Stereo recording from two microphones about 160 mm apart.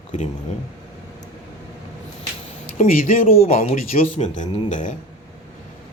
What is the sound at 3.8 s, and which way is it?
Speech, 60° left (ahead or behind).